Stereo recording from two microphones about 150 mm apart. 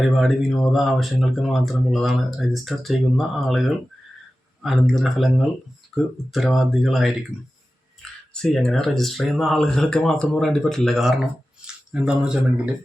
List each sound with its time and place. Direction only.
0.0 s speech: centre (ahead or behind)
4.6 s speech: centre (ahead or behind)
8.3 s speech: 5° left (ahead or behind)